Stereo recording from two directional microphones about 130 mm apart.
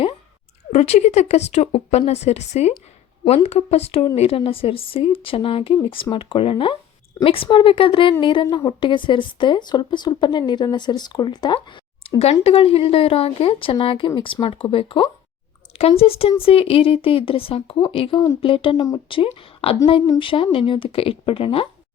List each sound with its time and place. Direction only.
0.7 s a woman's voice: 60° left (ahead or behind); by 21.7 s 45° left (ahead or behind)